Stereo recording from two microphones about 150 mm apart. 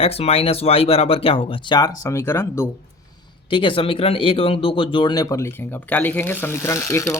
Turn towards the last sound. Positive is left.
turn(degrees=20)  # may be behind; listen again after turning